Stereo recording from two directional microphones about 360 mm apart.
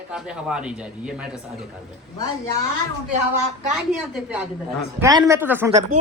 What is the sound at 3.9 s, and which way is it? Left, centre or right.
Speech, centre.